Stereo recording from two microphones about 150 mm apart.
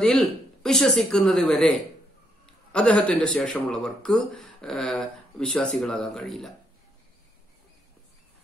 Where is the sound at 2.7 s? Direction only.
10° left (ahead or behind).